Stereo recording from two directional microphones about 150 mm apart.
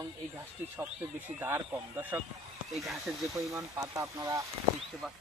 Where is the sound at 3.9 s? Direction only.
20° right (ahead or behind).